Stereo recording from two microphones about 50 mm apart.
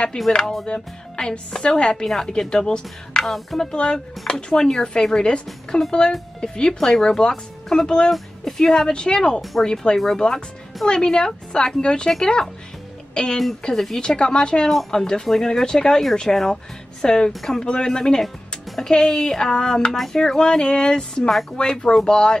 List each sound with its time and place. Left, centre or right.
0.2 s speech: centre
3.3 s speech: centre
3.7 s speech: centre
9.9 s speech: centre
14.7 s speech: centre
17.6 s speech: centre
21.3 s speech: centre
21.5 s speech: centre